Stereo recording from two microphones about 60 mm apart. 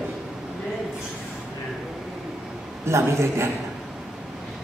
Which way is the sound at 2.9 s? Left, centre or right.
Right.